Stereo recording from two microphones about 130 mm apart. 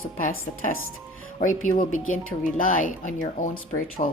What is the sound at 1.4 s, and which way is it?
Speech, 80° left.